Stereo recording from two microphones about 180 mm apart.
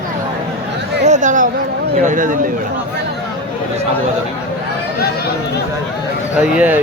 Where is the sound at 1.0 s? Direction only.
45° right (ahead or behind).